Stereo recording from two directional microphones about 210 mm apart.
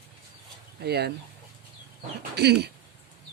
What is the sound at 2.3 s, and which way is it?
Speech, 50° right (ahead or behind).